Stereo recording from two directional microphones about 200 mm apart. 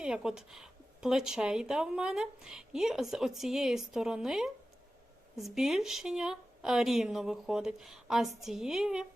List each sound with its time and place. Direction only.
0.0 s speech: 5° right (ahead or behind)